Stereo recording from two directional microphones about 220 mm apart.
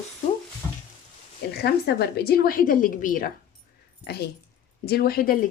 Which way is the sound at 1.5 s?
45° left (ahead or behind).